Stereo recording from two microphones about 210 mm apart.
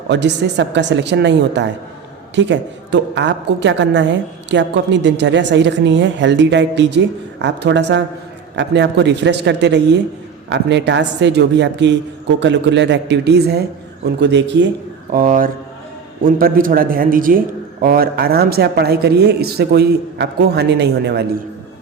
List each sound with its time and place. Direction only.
0.1 s a woman's voice: 55° right (ahead or behind)
15.1 s a man's voice: 40° right (ahead or behind)